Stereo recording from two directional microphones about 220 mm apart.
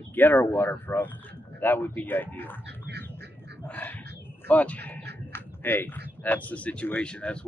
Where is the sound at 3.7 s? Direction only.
10° left (ahead or behind).